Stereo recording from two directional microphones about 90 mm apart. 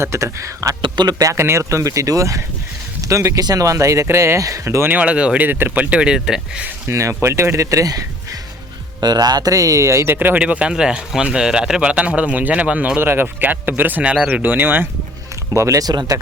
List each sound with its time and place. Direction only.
0.0 s speech: 30° right (ahead or behind)
0.8 s speech: 55° right (ahead or behind)
1.2 s speech: 30° right (ahead or behind)
4.9 s speech: 15° right (ahead or behind)
6.8 s speech: 35° right (ahead or behind)
15.5 s speech: 35° right (ahead or behind)